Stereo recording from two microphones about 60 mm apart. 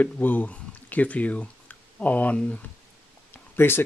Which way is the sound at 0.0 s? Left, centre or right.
Left.